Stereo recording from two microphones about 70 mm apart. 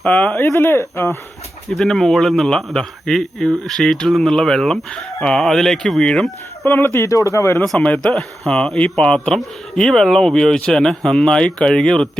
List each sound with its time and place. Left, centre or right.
0.0 s speech: centre
0.4 s speech: left
1.7 s a man's voice: centre
6.7 s speech: left
7.8 s a man's voice: centre